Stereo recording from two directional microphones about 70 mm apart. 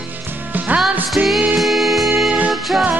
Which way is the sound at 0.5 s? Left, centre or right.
Right.